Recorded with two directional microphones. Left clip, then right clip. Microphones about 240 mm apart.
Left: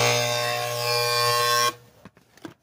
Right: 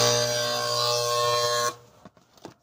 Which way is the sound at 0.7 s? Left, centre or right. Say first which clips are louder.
Left 1 dB; centre.